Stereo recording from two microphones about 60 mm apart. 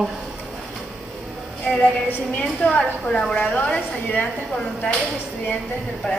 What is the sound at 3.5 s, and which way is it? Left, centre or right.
Speech, left.